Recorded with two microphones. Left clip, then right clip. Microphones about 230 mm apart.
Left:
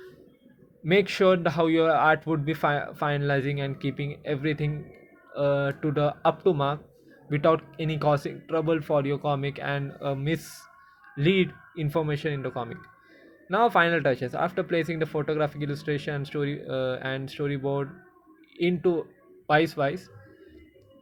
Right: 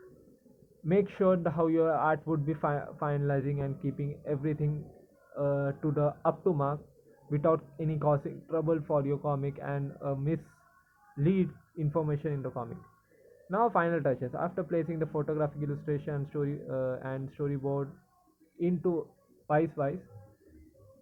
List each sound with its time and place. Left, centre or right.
0.9 s speech: left